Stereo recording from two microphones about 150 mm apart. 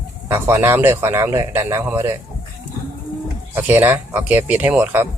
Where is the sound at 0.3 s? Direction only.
15° right (ahead or behind).